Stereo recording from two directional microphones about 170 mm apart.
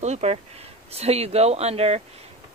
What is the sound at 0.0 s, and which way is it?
Speech, 40° right (ahead or behind).